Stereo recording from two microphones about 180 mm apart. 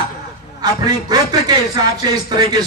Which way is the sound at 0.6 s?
20° right (ahead or behind).